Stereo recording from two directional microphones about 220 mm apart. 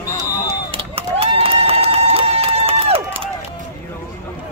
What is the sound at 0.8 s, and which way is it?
Crowd, 25° right (ahead or behind).